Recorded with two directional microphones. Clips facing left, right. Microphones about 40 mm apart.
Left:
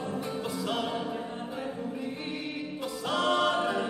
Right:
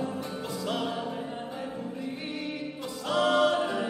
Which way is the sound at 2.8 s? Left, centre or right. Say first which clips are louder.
Right 2 dB; centre.